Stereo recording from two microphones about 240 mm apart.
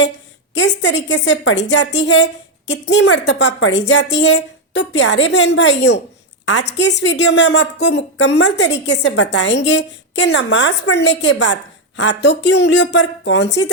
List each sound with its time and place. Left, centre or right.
0.5 s a woman's voice: left